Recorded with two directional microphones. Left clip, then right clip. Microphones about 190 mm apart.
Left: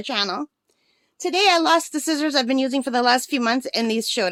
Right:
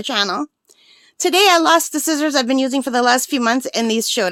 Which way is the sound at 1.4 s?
20° right (ahead or behind).